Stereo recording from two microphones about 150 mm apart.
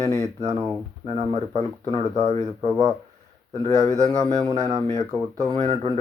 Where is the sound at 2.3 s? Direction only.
50° right (ahead or behind).